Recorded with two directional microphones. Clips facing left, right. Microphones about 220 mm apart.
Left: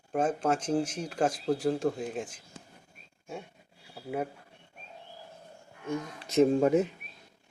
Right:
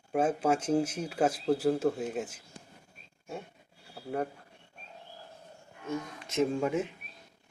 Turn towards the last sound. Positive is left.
turn(degrees=40)  # may be behind; listen again after turning